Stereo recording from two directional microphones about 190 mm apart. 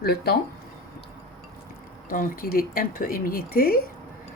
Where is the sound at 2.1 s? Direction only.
50° left (ahead or behind).